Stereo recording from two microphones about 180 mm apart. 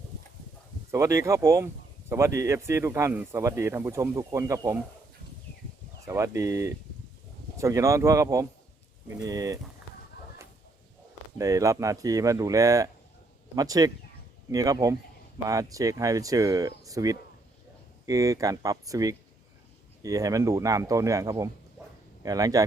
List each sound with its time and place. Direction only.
0.9 s speech: 15° right (ahead or behind)
6.1 s speech: 15° right (ahead or behind)
11.3 s speech: 20° right (ahead or behind)